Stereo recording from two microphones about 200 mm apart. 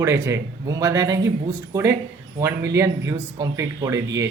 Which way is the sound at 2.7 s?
15° right (ahead or behind).